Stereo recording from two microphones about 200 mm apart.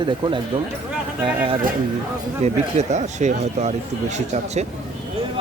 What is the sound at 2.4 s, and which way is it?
A man's voice, 35° right (ahead or behind).